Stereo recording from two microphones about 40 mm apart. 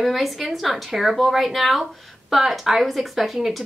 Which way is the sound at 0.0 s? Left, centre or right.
Centre.